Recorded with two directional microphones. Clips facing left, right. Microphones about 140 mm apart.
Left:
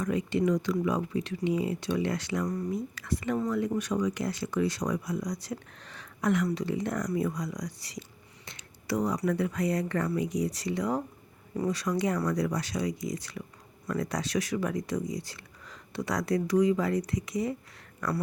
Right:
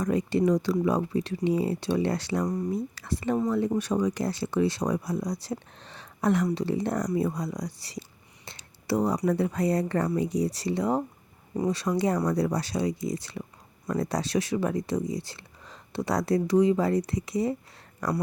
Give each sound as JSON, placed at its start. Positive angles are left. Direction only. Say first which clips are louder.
{"t": 0.0, "sound": "speech", "louder": "right 3 dB", "side_deg": -35}